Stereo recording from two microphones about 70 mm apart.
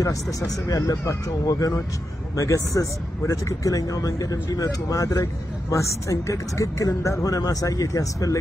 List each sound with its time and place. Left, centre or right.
0.0 s speech: left